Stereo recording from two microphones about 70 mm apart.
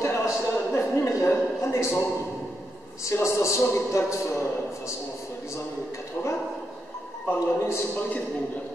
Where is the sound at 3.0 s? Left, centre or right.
Left.